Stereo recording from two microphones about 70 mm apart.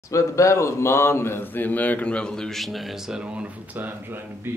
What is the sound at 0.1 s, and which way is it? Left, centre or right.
A man's voice, left.